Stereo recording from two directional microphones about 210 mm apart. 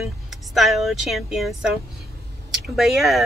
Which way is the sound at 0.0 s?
Centre (ahead or behind).